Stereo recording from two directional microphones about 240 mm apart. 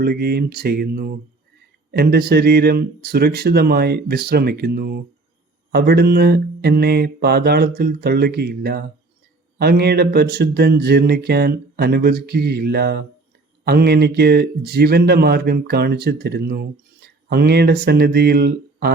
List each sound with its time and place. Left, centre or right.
0.0 s speech: right